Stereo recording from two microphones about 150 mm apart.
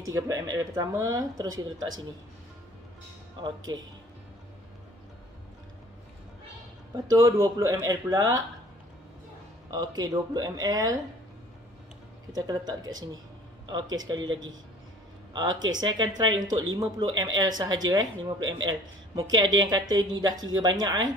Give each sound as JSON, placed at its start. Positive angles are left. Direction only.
{"t": 0.1, "sound": "speech", "side_deg": -20}
{"t": 3.3, "sound": "speech", "side_deg": -30}
{"t": 7.1, "sound": "speech", "side_deg": -25}
{"t": 9.7, "sound": "speech", "side_deg": -25}
{"t": 12.4, "sound": "speech", "side_deg": -25}